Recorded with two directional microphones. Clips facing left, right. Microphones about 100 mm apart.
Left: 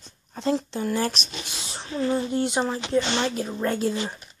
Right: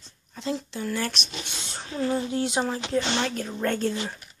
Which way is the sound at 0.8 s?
30° left (ahead or behind).